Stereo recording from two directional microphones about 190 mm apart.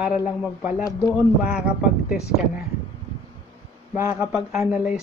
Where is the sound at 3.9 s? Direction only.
15° right (ahead or behind).